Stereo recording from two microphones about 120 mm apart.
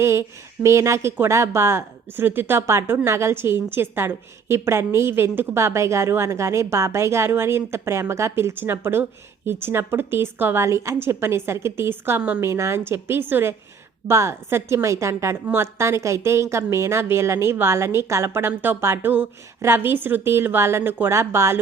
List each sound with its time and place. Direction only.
0.0 s speech: 20° right (ahead or behind)